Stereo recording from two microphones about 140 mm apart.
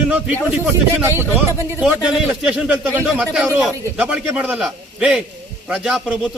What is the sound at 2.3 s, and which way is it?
A man's voice, 5° right (ahead or behind).